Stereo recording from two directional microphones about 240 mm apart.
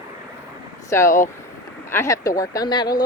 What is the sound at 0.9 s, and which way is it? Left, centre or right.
Speech, centre.